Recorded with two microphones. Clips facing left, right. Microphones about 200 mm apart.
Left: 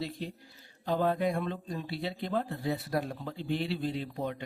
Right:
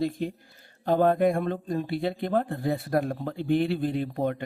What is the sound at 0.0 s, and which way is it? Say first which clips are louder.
Speech: right 9 dB; 50° right (ahead or behind).